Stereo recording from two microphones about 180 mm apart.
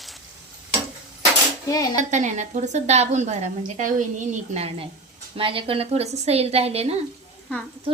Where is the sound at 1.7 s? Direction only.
20° left (ahead or behind).